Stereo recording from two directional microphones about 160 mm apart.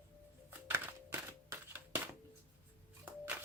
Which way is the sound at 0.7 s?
15° right (ahead or behind).